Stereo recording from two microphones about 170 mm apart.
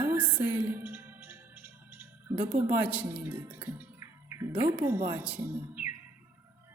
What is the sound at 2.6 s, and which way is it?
Speech, 10° right (ahead or behind).